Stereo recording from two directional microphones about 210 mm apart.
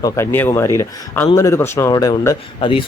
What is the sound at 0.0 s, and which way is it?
Speech, 10° left (ahead or behind).